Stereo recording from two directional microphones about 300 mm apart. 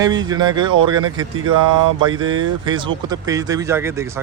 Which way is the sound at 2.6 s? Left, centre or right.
Centre.